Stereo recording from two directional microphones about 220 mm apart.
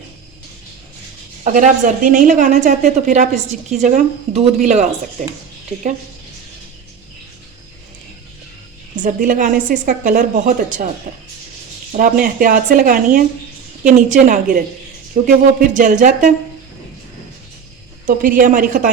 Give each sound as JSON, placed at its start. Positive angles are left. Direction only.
{"t": 1.5, "sound": "a woman's voice", "side_deg": -35}
{"t": 9.0, "sound": "a woman's voice", "side_deg": -35}
{"t": 18.0, "sound": "a woman's voice", "side_deg": -40}